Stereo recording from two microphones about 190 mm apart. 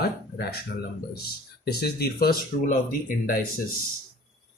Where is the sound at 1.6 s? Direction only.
55° left (ahead or behind).